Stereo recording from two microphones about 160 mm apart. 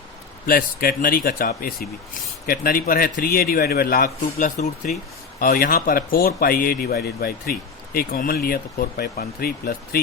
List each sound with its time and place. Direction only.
0.4 s speech: 65° left (ahead or behind)